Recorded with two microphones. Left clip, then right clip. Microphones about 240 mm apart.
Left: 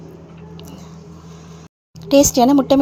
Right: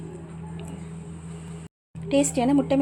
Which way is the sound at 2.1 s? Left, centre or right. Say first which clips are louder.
Left 10 dB; left.